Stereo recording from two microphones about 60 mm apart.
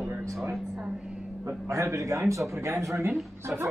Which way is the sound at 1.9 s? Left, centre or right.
Right.